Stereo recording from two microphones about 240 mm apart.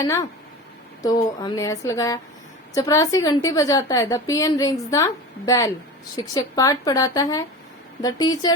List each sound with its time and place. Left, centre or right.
0.0 s a woman's voice: centre